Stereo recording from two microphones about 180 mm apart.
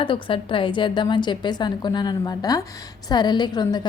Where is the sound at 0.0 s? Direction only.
30° left (ahead or behind).